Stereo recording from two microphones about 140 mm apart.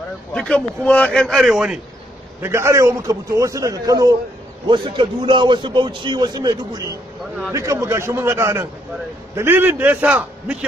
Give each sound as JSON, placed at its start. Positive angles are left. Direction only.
{"t": 0.3, "sound": "a man's voice", "side_deg": 10}
{"t": 2.4, "sound": "a man's voice", "side_deg": -20}